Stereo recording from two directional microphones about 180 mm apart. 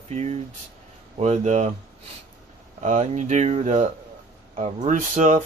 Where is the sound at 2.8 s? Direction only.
40° right (ahead or behind).